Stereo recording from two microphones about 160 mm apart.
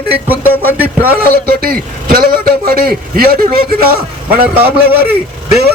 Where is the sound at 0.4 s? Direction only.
15° left (ahead or behind).